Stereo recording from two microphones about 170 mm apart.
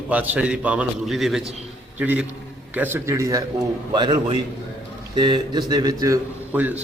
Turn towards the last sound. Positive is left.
turn(degrees=-10)  # may be behind; listen again after turning